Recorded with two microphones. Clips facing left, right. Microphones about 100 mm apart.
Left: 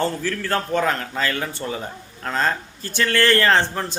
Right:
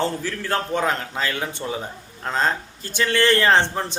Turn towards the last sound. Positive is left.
turn(degrees=-20)  # may be behind; listen again after turning